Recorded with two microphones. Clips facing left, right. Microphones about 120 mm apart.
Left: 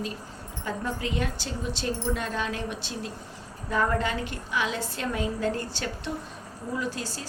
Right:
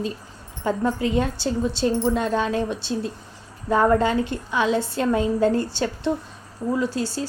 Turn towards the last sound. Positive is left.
turn(degrees=-30)  # may be behind; listen again after turning